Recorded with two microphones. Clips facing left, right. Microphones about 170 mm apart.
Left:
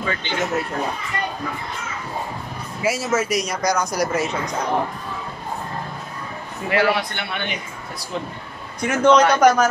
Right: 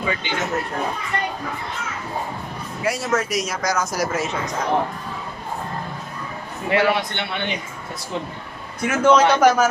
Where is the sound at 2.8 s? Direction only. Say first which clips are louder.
Left 1 dB; 5° left (ahead or behind).